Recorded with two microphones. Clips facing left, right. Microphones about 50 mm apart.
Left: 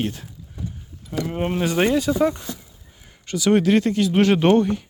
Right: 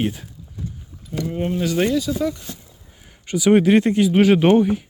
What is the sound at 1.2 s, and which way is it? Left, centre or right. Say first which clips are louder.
Speech: even; left.